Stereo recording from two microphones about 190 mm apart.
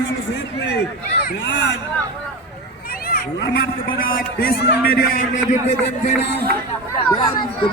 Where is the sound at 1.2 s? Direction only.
65° left (ahead or behind).